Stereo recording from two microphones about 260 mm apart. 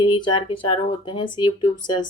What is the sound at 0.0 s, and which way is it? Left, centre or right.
Speech, centre.